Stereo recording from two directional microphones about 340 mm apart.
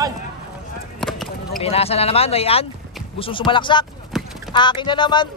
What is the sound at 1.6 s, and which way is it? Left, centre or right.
Speech, centre.